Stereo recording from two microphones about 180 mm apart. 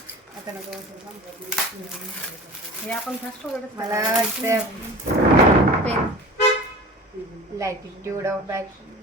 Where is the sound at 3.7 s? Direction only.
15° right (ahead or behind).